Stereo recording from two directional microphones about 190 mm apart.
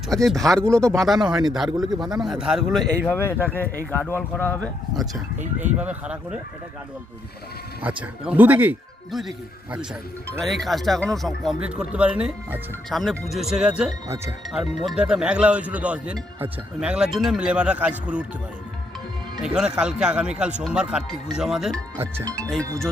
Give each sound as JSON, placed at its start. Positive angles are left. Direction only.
{"t": 0.3, "sound": "speech", "side_deg": 0}
{"t": 3.2, "sound": "speech", "side_deg": 10}
{"t": 5.5, "sound": "speech", "side_deg": -10}
{"t": 7.8, "sound": "speech", "side_deg": -5}
{"t": 10.3, "sound": "speech", "side_deg": 0}
{"t": 19.5, "sound": "speech", "side_deg": -5}
{"t": 22.0, "sound": "speech", "side_deg": -15}
{"t": 22.4, "sound": "speech", "side_deg": 5}